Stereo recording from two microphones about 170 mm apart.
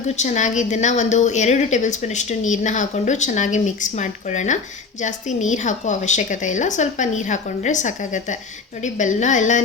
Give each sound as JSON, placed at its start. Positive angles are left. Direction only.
{"t": 0.2, "sound": "a woman's voice", "side_deg": 45}